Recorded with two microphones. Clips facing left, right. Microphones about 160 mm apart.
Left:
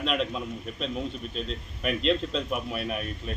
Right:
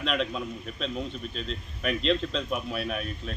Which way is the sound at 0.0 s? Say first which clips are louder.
Left 1 dB; centre (ahead or behind).